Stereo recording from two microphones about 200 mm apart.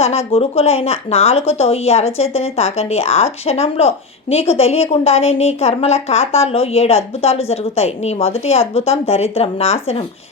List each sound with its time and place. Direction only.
0.0 s a woman's voice: 30° left (ahead or behind)